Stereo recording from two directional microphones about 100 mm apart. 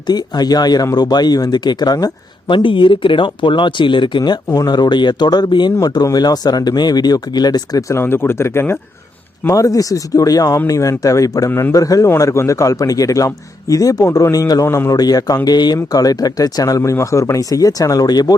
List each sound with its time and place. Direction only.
0.1 s a man's voice: 40° left (ahead or behind)
2.5 s a man's voice: 55° left (ahead or behind); by 8.8 s 25° left (ahead or behind)
9.5 s a man's voice: 35° left (ahead or behind)
14.7 s a man's voice: 25° left (ahead or behind)
14.9 s a man's voice: 40° left (ahead or behind)